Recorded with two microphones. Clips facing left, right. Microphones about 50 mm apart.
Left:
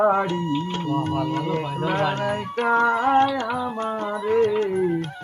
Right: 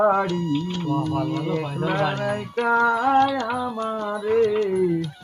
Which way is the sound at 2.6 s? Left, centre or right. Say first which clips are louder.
Even; left.